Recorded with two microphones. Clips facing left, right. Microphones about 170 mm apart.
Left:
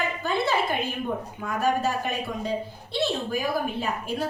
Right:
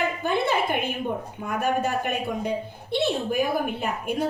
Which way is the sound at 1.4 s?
20° right (ahead or behind).